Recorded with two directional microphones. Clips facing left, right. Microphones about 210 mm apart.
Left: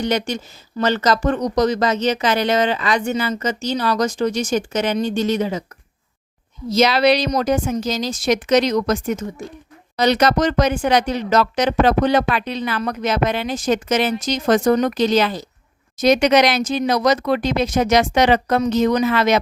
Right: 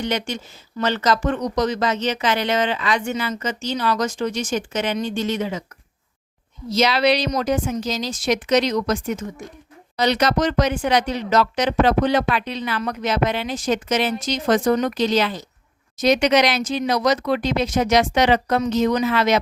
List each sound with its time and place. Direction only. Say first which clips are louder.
0.0 s speech: left 4 dB; 40° left (ahead or behind)
6.7 s speech: left 3 dB; 45° left (ahead or behind)